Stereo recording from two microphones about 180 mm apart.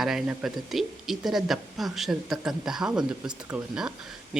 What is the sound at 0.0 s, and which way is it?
Speech, centre (ahead or behind).